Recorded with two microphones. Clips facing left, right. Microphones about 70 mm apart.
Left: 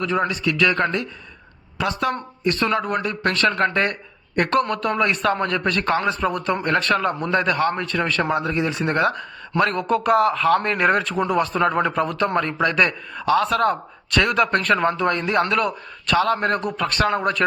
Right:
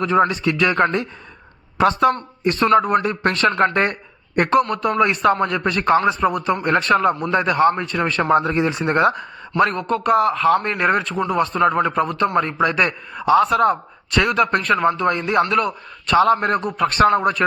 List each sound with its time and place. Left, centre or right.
0.0 s speech: right
2.4 s speech: right
4.4 s speech: centre
8.3 s speech: right
9.7 s a man's voice: centre
16.1 s speech: right
16.4 s speech: centre
16.8 s speech: right
17.2 s speech: centre